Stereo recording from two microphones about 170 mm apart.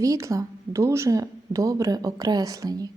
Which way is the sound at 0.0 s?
20° right (ahead or behind).